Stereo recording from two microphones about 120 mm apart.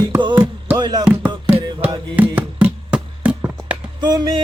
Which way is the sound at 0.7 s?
35° right (ahead or behind).